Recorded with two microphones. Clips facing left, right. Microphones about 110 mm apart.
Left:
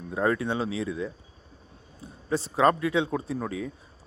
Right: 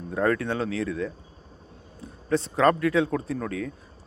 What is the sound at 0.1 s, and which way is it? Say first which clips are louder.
A man's voice: right 1 dB; 10° left (ahead or behind).